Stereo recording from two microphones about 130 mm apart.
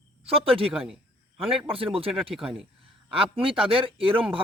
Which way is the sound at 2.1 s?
Centre (ahead or behind).